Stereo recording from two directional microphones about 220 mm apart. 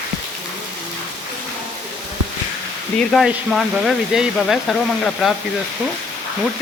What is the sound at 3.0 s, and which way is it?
Speech, centre (ahead or behind).